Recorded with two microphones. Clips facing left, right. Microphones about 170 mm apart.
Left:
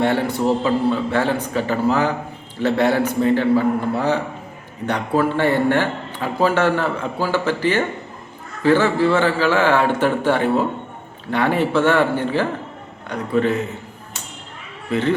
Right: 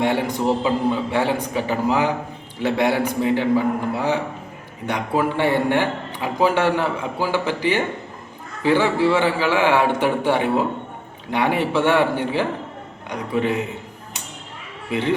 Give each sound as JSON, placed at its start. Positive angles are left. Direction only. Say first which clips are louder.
{"t": 0.0, "sound": "a man's voice", "louder": "left 2 dB", "side_deg": -15}
{"t": 14.8, "sound": "speech", "louder": "left 3 dB", "side_deg": -15}